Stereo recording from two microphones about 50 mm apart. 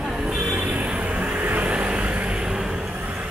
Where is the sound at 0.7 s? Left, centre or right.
Right.